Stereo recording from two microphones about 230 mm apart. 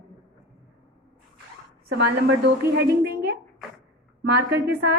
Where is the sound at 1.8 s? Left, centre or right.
Right.